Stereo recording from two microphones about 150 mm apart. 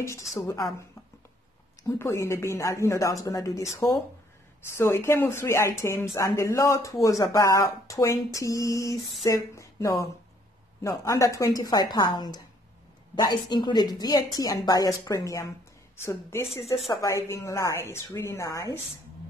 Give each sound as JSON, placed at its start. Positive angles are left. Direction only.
{"t": 0.0, "sound": "speech", "side_deg": 20}
{"t": 4.6, "sound": "a woman's voice", "side_deg": 15}